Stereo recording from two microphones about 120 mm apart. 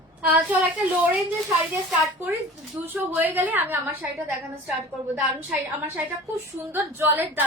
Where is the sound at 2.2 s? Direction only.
20° right (ahead or behind).